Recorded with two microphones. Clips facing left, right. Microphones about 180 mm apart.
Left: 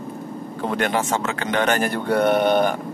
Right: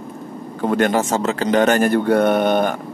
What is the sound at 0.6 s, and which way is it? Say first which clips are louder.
Speech: right 5 dB; 45° right (ahead or behind).